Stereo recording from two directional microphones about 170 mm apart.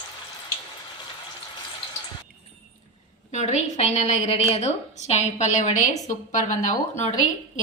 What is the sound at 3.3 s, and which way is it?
A woman's voice, 40° left (ahead or behind).